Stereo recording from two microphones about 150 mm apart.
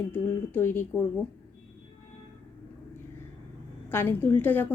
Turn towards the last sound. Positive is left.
turn(degrees=15)  # may be behind; listen again after turning